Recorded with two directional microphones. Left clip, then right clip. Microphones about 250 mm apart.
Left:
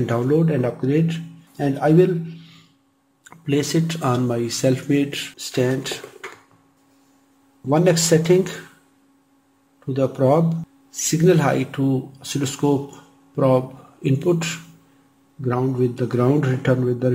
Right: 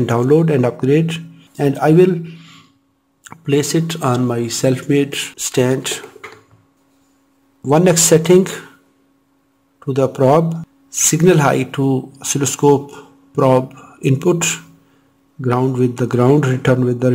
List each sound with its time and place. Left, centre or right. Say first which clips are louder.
0.0 s speech: right 6 dB; right
7.7 s speech: right 5 dB; right
9.8 s speech: right 5 dB; right